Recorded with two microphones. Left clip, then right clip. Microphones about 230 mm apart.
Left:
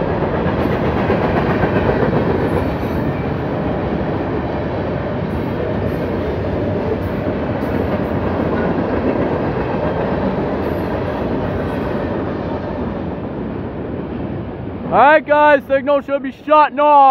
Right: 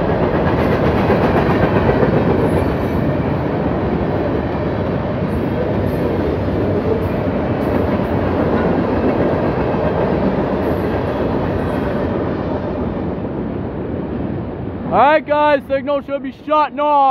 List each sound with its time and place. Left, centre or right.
14.9 s speech: centre